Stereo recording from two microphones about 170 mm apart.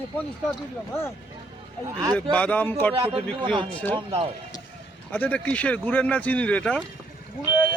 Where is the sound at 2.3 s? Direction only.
10° left (ahead or behind).